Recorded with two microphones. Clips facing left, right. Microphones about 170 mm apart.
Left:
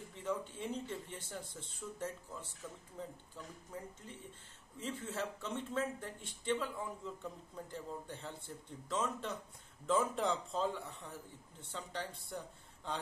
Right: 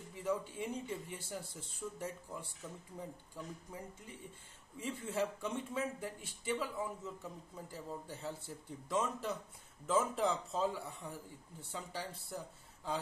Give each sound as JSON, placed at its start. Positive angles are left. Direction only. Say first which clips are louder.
{"t": 0.1, "sound": "a man's voice", "louder": "right 2 dB", "side_deg": -10}